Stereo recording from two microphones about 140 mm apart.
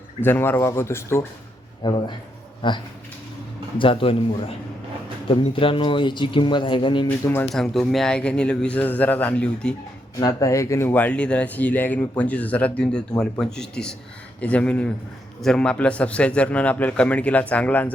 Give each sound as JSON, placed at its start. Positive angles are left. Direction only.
{"t": 0.2, "sound": "speech", "side_deg": 15}
{"t": 1.8, "sound": "speech", "side_deg": 35}
{"t": 7.3, "sound": "speech", "side_deg": 15}
{"t": 7.5, "sound": "speech", "side_deg": 0}
{"t": 10.2, "sound": "speech", "side_deg": 25}